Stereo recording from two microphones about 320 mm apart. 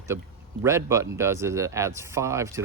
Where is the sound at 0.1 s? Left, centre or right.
Centre.